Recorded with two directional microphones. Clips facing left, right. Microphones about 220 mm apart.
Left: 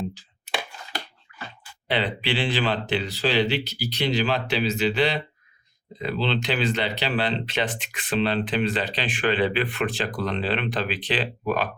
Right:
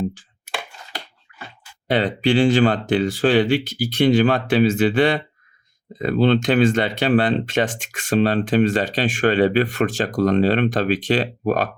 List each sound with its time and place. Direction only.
1.9 s speech: 45° right (ahead or behind)